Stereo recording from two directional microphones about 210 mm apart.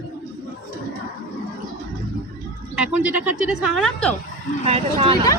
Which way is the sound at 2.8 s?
5° right (ahead or behind).